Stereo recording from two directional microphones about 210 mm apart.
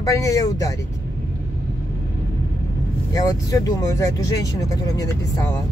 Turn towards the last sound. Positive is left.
turn(degrees=15)  # may be behind; listen again after turning